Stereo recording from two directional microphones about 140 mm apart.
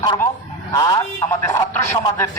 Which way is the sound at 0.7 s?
25° left (ahead or behind).